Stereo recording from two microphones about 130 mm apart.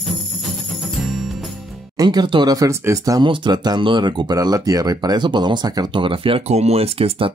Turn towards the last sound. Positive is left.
turn(degrees=-45)  # may be behind; listen again after turning